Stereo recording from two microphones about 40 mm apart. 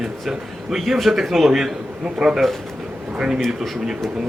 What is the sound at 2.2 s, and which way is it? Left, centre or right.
Speech, centre.